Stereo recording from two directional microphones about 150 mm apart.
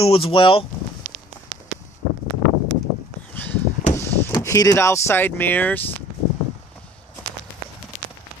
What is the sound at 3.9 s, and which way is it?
Speech, 15° left (ahead or behind).